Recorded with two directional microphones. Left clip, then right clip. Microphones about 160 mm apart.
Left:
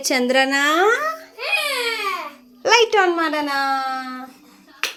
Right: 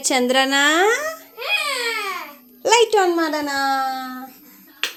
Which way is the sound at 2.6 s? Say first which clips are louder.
Even; 15° right (ahead or behind).